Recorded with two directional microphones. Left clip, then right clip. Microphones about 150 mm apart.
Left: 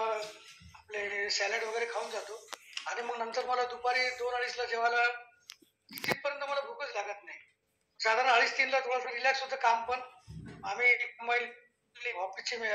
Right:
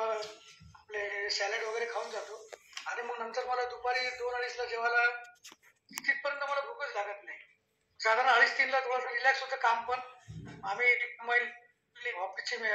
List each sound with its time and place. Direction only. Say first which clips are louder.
0.8 s a man's voice: left 1 dB; 10° left (ahead or behind)